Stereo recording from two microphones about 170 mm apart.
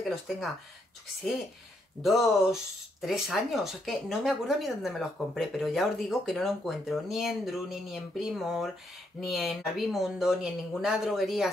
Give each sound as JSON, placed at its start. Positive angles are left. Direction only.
{"t": 0.1, "sound": "speech", "side_deg": 0}
{"t": 2.0, "sound": "speech", "side_deg": 0}